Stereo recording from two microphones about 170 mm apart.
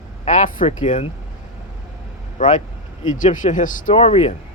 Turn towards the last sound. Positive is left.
turn(degrees=35)  # may be behind; listen again after turning